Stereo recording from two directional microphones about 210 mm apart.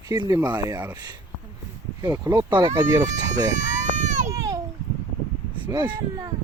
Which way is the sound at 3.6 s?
35° right (ahead or behind).